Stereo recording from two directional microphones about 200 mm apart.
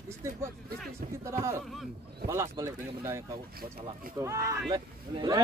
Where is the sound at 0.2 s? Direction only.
15° right (ahead or behind).